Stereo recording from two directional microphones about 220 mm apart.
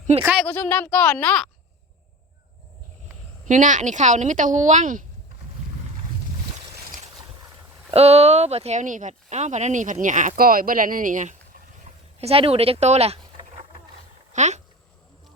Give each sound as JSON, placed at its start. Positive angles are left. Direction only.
{"t": 0.2, "sound": "speech", "side_deg": -5}
{"t": 0.4, "sound": "speech", "side_deg": 5}
{"t": 3.4, "sound": "speech", "side_deg": -35}
{"t": 7.9, "sound": "speech", "side_deg": -30}